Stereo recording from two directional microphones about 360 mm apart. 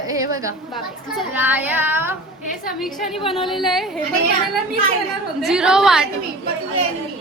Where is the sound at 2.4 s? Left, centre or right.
Left.